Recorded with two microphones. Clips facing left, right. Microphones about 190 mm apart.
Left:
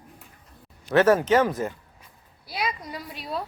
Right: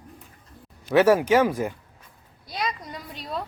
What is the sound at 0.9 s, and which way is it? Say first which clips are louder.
Speech: right 1 dB; 10° right (ahead or behind).